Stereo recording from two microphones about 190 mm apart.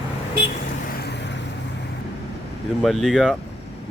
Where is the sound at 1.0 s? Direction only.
65° left (ahead or behind).